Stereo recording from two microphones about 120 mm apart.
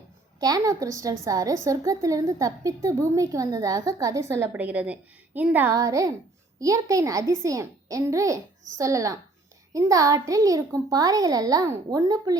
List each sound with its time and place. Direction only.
0.3 s a woman's voice: 30° right (ahead or behind); by 5.7 s 15° right (ahead or behind)
5.7 s a woman's voice: 25° right (ahead or behind)